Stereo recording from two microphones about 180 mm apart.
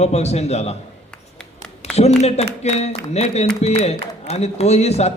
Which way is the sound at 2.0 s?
35° left (ahead or behind).